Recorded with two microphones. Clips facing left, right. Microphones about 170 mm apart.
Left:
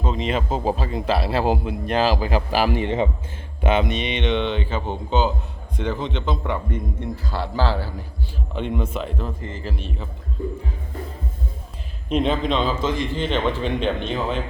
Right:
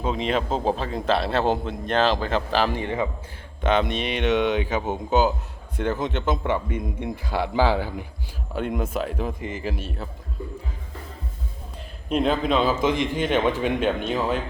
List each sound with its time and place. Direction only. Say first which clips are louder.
0.0 s a man's voice: even; centre (ahead or behind)
2.8 s a man's voice: left 4 dB; 25° left (ahead or behind)
3.6 s a man's voice: left 1 dB; 5° left (ahead or behind); by 7.9 s 15° right (ahead or behind)
8.5 s speech: even; 5° right (ahead or behind)
12.0 s a man's voice: left 1 dB; centre (ahead or behind)